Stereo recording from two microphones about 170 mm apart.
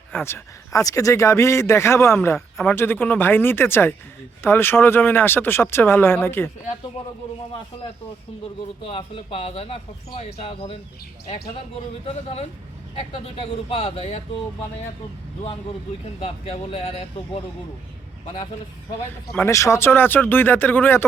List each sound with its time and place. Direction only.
0.1 s a man's voice: 15° left (ahead or behind)
8.8 s speech: 35° left (ahead or behind)
12.0 s speech: 35° left (ahead or behind)
16.2 s speech: 35° left (ahead or behind)
19.5 s a man's voice: 15° left (ahead or behind)